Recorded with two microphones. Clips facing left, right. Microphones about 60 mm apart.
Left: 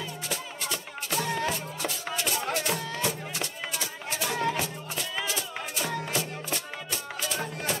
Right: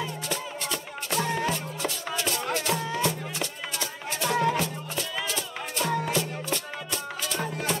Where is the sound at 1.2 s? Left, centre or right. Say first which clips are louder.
Right 1 dB; centre.